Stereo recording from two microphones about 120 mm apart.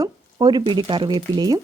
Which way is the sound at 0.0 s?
35° right (ahead or behind).